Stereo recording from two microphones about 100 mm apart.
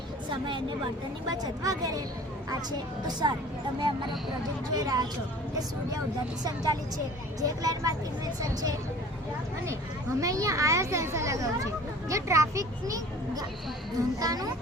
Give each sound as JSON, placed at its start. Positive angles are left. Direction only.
{"t": 0.3, "sound": "speech", "side_deg": -55}
{"t": 1.3, "sound": "speech", "side_deg": -40}
{"t": 3.1, "sound": "speech", "side_deg": -45}
{"t": 4.7, "sound": "speech", "side_deg": -40}
{"t": 6.4, "sound": "speech", "side_deg": -40}
{"t": 10.2, "sound": "speech", "side_deg": -35}